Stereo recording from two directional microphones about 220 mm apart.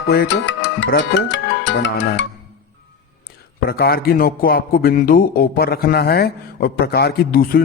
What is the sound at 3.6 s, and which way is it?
A man's voice, 45° left (ahead or behind).